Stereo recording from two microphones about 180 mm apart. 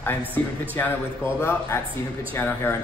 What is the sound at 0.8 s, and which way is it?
A man's voice, 10° left (ahead or behind).